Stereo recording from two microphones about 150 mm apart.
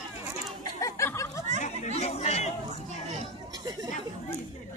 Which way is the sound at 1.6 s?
45° left (ahead or behind).